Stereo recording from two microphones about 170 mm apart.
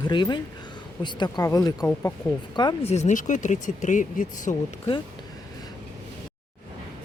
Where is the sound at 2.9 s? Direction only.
45° left (ahead or behind).